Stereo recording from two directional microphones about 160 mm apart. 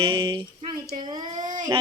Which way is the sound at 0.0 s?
30° right (ahead or behind).